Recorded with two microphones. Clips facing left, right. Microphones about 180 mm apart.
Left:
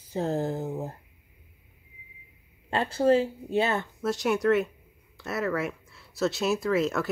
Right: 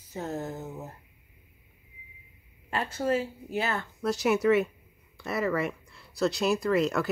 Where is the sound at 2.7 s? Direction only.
30° left (ahead or behind).